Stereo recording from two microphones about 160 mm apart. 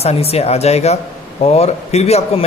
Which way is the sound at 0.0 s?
40° left (ahead or behind).